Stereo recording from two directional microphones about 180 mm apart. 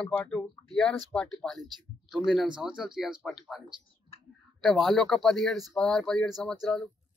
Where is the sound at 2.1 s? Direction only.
Centre (ahead or behind).